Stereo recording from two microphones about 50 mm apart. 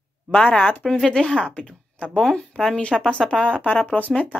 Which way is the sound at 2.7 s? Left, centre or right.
Left.